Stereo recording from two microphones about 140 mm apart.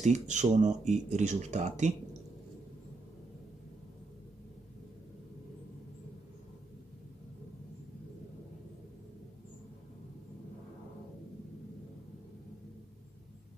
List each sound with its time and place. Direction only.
0.0 s speech: 60° right (ahead or behind)